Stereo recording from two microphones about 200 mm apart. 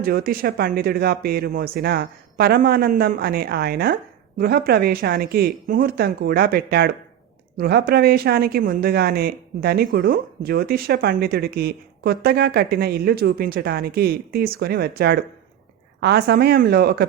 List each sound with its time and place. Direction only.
0.0 s speech: 50° right (ahead or behind)